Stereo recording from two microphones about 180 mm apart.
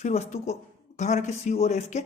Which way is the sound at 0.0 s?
40° left (ahead or behind).